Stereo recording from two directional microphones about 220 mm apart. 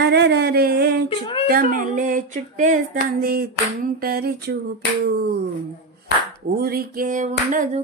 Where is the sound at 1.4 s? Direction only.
40° right (ahead or behind).